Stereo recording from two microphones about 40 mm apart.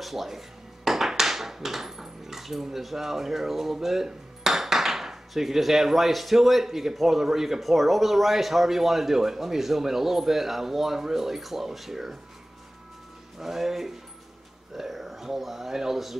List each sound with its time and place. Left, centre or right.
0.0 s speech: centre
13.4 s speech: centre